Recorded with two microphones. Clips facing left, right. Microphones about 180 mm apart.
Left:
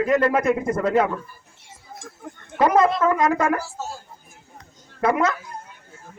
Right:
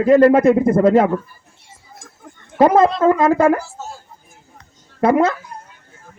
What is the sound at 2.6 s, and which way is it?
Speech, 25° right (ahead or behind).